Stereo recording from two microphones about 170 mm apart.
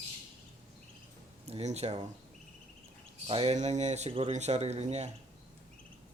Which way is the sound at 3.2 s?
35° right (ahead or behind).